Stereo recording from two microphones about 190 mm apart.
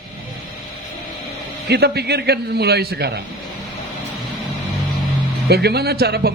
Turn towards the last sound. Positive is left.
turn(degrees=-55)  # may be behind; listen again after turning